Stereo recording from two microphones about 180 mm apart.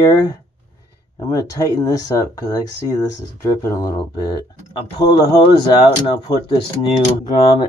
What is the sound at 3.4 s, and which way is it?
Speech, 15° left (ahead or behind).